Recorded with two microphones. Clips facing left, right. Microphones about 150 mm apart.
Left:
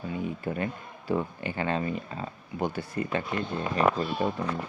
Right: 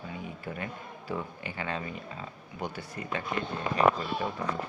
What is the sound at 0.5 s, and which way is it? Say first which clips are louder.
Speech: left 6 dB; 30° left (ahead or behind).